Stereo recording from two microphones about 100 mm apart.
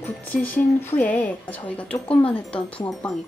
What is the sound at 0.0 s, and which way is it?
Speech, 20° left (ahead or behind).